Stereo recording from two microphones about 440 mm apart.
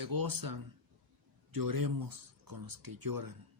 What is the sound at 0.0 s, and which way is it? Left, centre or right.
Speech, right.